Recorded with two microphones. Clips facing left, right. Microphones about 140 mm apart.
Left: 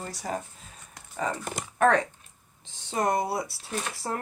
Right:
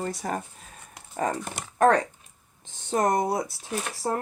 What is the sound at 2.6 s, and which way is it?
Speech, 45° right (ahead or behind).